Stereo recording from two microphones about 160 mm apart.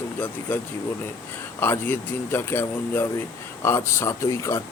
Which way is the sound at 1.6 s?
15° left (ahead or behind).